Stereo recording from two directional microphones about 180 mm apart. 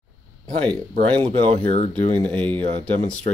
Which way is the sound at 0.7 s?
30° right (ahead or behind).